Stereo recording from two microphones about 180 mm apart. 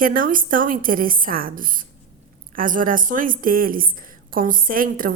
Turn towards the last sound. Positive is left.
turn(degrees=-50)  # may be behind; listen again after turning